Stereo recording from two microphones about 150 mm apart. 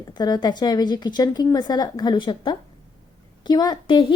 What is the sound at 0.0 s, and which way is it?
A woman's voice, 30° left (ahead or behind).